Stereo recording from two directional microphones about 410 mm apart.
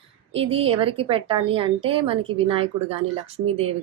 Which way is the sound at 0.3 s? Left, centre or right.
Centre.